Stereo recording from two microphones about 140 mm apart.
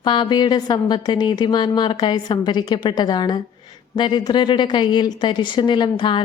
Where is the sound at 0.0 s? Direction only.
30° left (ahead or behind).